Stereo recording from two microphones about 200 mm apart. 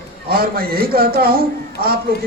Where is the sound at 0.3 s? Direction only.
50° right (ahead or behind).